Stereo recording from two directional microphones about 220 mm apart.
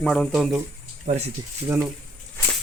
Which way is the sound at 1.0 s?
30° right (ahead or behind).